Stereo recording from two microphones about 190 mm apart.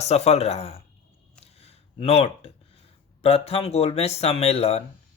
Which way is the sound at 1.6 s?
30° left (ahead or behind).